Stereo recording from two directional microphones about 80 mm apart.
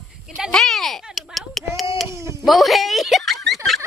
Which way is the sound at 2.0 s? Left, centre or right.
Right.